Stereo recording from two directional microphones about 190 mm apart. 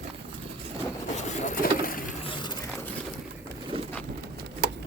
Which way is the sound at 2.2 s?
25° left (ahead or behind).